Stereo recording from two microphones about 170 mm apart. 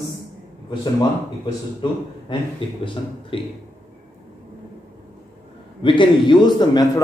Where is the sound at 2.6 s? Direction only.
30° left (ahead or behind).